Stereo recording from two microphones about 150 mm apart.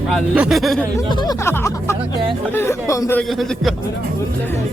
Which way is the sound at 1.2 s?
20° left (ahead or behind).